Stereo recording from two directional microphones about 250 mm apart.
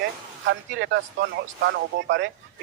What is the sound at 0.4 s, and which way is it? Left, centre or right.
Speech, right.